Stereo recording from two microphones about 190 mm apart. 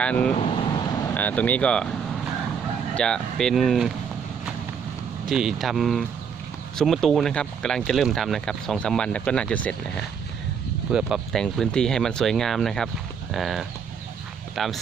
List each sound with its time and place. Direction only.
0.0 s speech: 5° left (ahead or behind)
0.6 s vehicle: 25° left (ahead or behind)
1.1 s speech: 10° left (ahead or behind)
2.9 s speech: 5° left (ahead or behind)
5.2 s speech: centre (ahead or behind)